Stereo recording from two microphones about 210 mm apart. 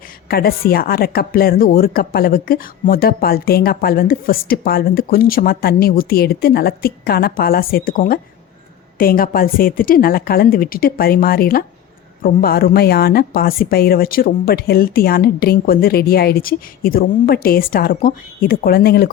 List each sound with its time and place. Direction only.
0.3 s a woman's voice: 45° left (ahead or behind)